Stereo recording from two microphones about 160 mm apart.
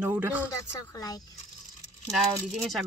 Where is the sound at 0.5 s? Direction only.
20° left (ahead or behind).